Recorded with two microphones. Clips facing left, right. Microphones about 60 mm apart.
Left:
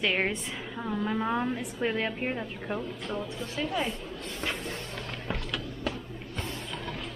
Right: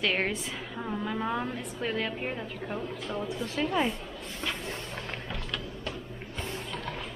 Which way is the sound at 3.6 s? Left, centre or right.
Centre.